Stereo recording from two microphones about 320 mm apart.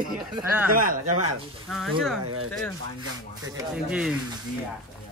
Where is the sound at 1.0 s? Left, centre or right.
Right.